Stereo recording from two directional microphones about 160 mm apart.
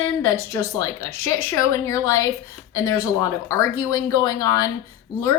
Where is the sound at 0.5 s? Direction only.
20° left (ahead or behind).